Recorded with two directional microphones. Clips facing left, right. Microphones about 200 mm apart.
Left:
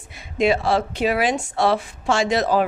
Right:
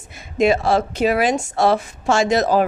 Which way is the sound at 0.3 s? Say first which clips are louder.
Right 3 dB; 45° right (ahead or behind).